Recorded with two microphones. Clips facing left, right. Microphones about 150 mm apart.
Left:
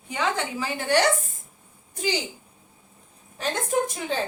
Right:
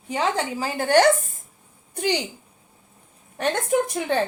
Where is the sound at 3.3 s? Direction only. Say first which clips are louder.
Right 4 dB; 60° right (ahead or behind).